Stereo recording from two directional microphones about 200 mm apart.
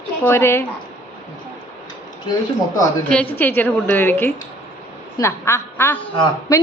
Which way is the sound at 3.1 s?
10° left (ahead or behind).